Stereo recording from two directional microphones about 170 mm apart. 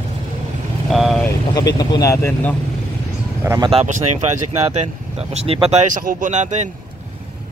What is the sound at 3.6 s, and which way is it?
Speech, 40° right (ahead or behind).